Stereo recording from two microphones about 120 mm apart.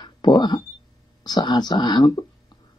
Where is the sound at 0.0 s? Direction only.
40° left (ahead or behind).